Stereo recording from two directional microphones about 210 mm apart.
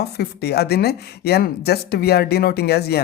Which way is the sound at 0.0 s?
50° left (ahead or behind).